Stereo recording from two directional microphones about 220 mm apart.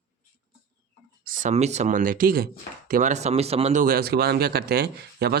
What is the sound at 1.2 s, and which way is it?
Speech, 35° right (ahead or behind).